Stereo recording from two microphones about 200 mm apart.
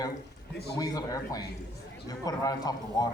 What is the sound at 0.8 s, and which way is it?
A man's voice, 20° left (ahead or behind).